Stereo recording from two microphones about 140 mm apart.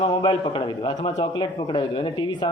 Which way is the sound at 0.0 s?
35° left (ahead or behind).